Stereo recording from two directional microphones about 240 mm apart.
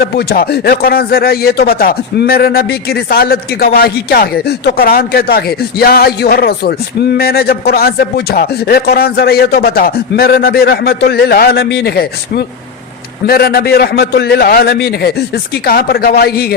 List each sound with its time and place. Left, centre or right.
0.0 s speech: left